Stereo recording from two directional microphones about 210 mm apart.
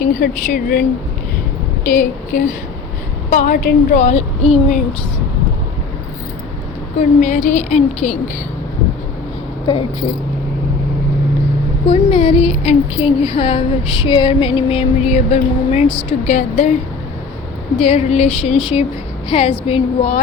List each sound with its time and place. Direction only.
0.0 s a woman's voice: 40° left (ahead or behind)
7.0 s a woman's voice: 35° left (ahead or behind)
9.7 s speech: 20° left (ahead or behind)
11.9 s a woman's voice: 25° left (ahead or behind)
17.7 s speech: 30° left (ahead or behind)